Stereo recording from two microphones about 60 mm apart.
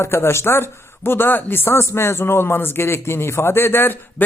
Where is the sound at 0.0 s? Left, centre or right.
Left.